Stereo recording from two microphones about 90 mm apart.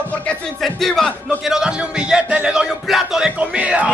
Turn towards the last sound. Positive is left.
turn(degrees=-15)  # may be behind; listen again after turning